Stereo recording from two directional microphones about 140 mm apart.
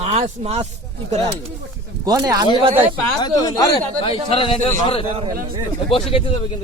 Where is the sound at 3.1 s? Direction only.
30° left (ahead or behind).